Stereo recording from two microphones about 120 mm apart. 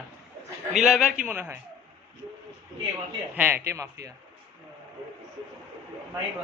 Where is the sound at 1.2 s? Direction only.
15° right (ahead or behind).